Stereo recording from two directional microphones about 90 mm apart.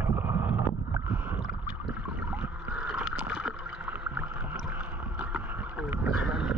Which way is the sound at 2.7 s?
5° right (ahead or behind).